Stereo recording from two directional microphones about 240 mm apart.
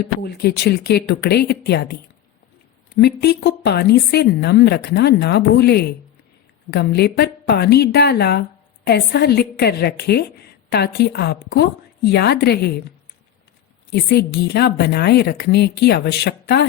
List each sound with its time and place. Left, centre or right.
0.0 s a woman's voice: left
13.9 s a woman's voice: left